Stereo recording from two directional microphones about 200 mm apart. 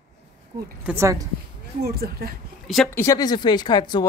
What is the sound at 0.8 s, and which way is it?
Speech, 15° right (ahead or behind).